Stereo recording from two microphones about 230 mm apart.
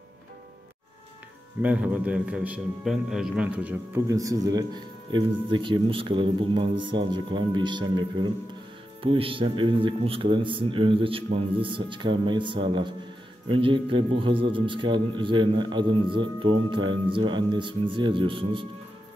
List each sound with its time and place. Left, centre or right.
1.6 s a man's voice: centre; by 18.7 s right